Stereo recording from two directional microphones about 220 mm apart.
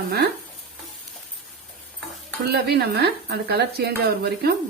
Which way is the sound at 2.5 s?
45° right (ahead or behind).